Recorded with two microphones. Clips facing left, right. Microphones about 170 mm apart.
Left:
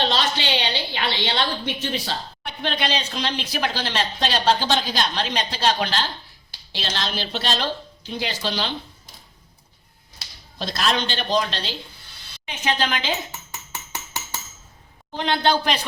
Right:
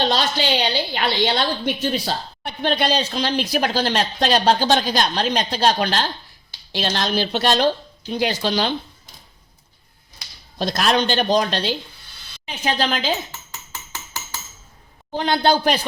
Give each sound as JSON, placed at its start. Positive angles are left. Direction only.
{"t": 0.0, "sound": "speech", "side_deg": -40}
{"t": 10.6, "sound": "speech", "side_deg": -50}
{"t": 12.5, "sound": "speech", "side_deg": -35}
{"t": 15.1, "sound": "speech", "side_deg": -40}